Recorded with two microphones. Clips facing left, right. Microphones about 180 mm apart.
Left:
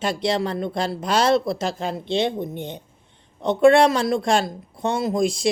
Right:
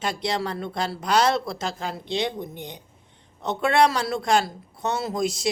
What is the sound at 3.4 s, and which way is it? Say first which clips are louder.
Speech: left 6 dB; 25° left (ahead or behind).